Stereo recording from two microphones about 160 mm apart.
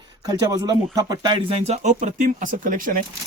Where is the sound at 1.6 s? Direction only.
45° right (ahead or behind).